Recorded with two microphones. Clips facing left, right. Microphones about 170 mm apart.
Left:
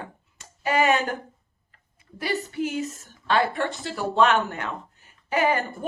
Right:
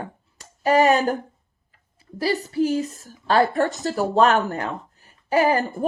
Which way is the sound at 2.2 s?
35° right (ahead or behind).